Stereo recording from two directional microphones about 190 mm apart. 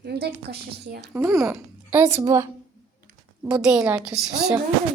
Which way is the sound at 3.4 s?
5° right (ahead or behind).